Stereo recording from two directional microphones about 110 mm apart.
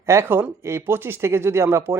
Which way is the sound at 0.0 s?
25° right (ahead or behind).